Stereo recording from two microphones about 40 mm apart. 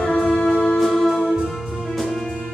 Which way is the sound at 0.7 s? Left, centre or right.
Centre.